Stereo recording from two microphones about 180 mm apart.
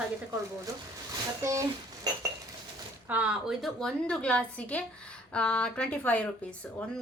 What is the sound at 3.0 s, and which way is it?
A woman's voice, 10° right (ahead or behind).